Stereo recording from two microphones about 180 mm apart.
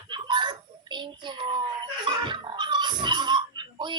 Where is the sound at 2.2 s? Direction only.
25° right (ahead or behind).